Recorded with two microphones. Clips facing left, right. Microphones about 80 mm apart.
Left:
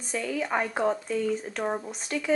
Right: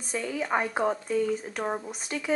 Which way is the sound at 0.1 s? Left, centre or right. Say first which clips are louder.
Even; centre.